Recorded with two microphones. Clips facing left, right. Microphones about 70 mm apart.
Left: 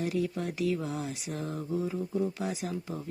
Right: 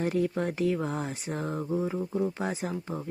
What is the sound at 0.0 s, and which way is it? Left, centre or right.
Speech, right.